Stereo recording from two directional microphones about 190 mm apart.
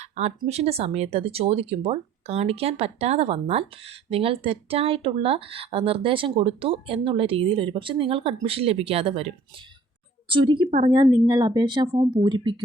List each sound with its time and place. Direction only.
0.0 s speech: 35° right (ahead or behind)
10.7 s speech: 40° right (ahead or behind)
11.3 s speech: 20° right (ahead or behind)